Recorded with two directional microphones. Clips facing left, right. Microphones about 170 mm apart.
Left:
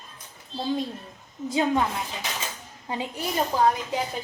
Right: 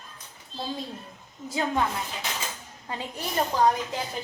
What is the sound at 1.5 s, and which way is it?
Speech, 20° left (ahead or behind).